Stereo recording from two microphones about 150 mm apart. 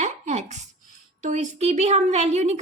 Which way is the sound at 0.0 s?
50° right (ahead or behind).